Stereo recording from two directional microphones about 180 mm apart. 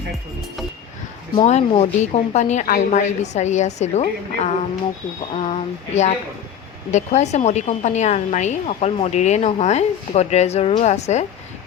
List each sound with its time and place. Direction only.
1.4 s speech: 40° left (ahead or behind)